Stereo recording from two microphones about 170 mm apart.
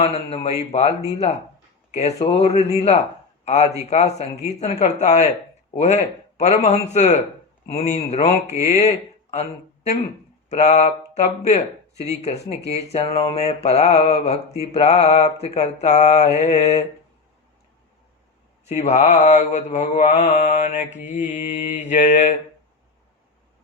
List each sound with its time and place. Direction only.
0.0 s speech: 40° left (ahead or behind)
18.8 s speech: 40° left (ahead or behind)
21.3 s mantra: 50° left (ahead or behind)